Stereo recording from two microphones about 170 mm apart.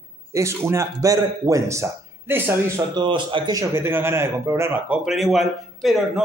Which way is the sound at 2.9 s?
25° right (ahead or behind).